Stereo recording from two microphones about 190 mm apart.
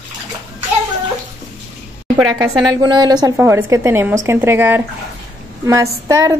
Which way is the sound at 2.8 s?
20° right (ahead or behind).